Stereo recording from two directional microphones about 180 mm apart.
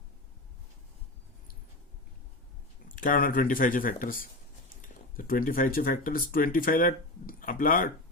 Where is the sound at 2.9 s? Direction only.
50° left (ahead or behind).